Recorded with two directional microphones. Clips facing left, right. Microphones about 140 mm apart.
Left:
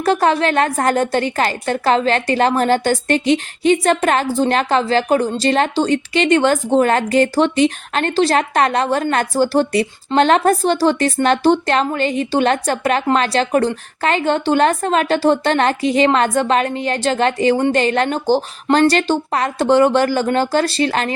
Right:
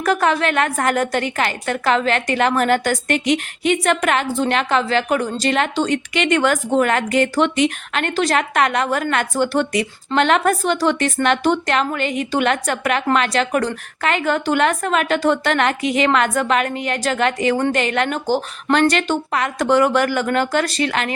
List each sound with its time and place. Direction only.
0.0 s a woman's voice: 30° left (ahead or behind)